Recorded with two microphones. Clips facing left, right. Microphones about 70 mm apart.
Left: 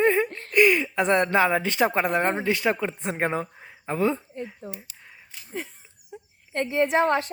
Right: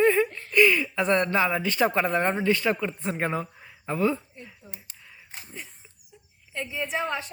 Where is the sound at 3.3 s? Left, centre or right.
Left.